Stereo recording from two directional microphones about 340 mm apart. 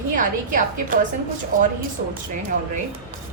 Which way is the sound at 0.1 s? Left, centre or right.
Right.